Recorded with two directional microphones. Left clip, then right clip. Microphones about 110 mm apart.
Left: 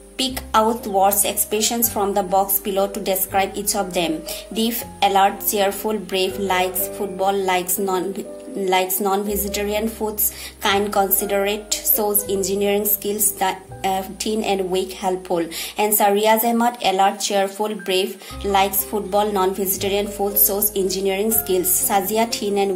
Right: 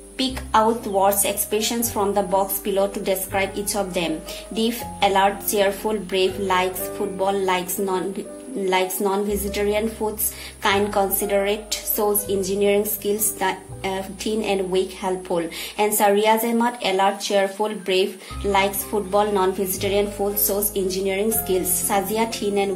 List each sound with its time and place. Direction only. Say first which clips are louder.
0.2 s a woman's voice: left 1 dB; 50° left (ahead or behind)